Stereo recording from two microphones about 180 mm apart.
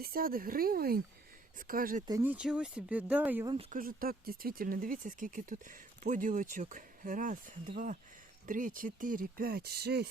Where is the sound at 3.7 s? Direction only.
50° right (ahead or behind).